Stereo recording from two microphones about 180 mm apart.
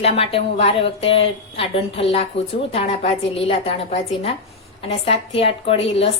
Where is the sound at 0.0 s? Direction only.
35° left (ahead or behind).